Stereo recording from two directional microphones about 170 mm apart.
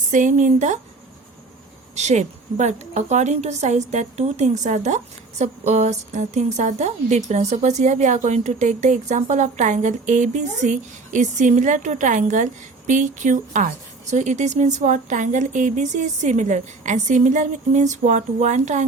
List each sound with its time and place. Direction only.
0.1 s a woman's voice: 50° right (ahead or behind)
2.0 s a woman's voice: 40° right (ahead or behind)